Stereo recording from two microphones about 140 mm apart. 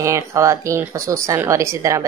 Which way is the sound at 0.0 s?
20° right (ahead or behind).